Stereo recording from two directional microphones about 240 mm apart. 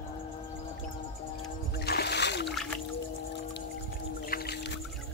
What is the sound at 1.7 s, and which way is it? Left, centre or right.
Splash, left.